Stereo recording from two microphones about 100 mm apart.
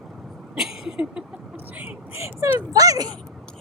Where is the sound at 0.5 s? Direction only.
5° right (ahead or behind).